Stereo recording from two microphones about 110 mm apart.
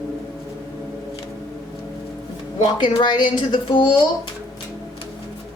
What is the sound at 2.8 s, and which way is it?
A woman's voice, 45° left (ahead or behind).